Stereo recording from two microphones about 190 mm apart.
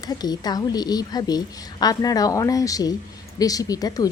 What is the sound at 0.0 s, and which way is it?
Speech, 20° left (ahead or behind).